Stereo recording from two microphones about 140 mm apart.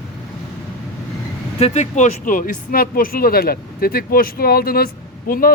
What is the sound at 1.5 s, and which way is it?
Speech, 45° left (ahead or behind).